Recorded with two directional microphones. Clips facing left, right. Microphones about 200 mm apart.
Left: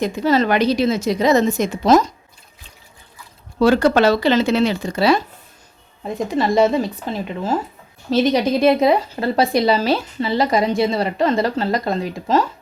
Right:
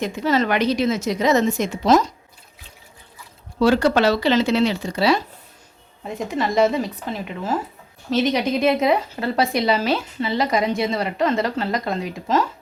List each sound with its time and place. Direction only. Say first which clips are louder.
0.0 s speech: left 3 dB; 35° left (ahead or behind)
3.6 s speech: left 3 dB; 50° left (ahead or behind)
6.1 s speech: left 3 dB; 35° left (ahead or behind)